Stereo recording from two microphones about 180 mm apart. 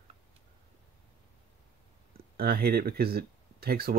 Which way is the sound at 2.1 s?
60° right (ahead or behind).